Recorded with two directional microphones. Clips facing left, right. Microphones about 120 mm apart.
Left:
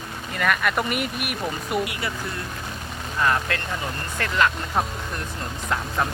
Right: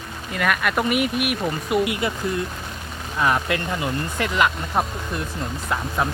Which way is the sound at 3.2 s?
10° right (ahead or behind).